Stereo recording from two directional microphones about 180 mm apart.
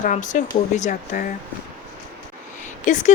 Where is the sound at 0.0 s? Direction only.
45° left (ahead or behind).